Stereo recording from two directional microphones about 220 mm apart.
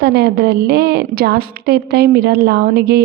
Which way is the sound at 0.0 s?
50° right (ahead or behind).